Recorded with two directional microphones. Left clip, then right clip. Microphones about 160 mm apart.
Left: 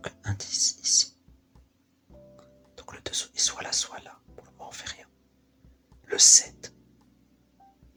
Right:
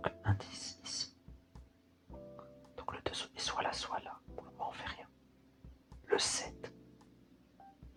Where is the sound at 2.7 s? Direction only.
25° left (ahead or behind).